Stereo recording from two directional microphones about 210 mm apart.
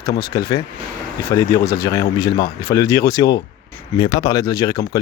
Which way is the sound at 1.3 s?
15° left (ahead or behind).